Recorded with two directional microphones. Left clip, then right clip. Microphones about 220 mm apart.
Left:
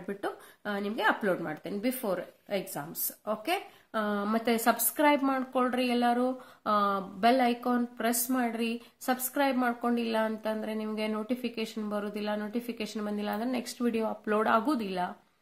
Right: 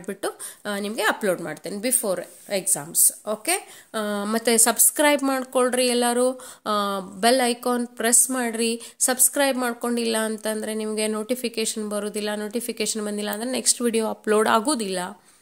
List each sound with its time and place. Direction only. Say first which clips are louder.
0.0 s a woman's voice: right 6 dB; 45° right (ahead or behind)